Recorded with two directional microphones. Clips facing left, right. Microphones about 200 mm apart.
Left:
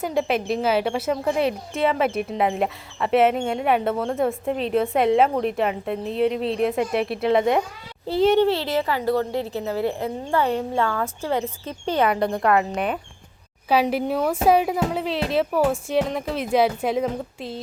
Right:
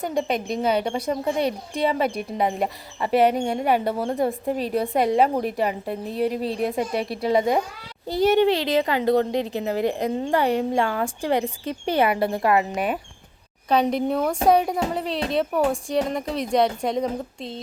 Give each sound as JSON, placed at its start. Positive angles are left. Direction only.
{"t": 0.0, "sound": "speech", "side_deg": 5}
{"t": 8.3, "sound": "a woman's voice", "side_deg": -15}